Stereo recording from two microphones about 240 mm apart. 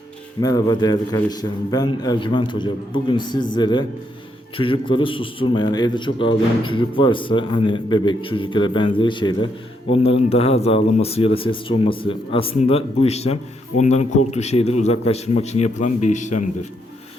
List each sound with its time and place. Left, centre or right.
0.4 s a man's voice: centre